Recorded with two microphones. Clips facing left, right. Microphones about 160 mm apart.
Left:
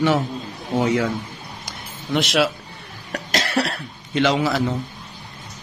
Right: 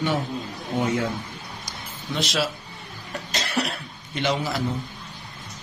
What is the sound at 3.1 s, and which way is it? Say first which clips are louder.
Speech: left 6 dB; 90° left.